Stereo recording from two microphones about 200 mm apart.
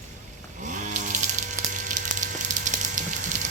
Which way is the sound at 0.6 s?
40° right (ahead or behind).